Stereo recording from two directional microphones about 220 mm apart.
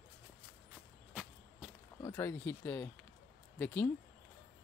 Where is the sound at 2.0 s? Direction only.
15° left (ahead or behind).